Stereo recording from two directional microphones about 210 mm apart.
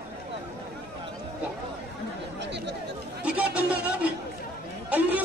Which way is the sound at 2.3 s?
55° right (ahead or behind).